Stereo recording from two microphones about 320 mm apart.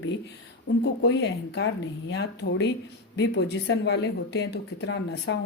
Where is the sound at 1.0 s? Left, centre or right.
Left.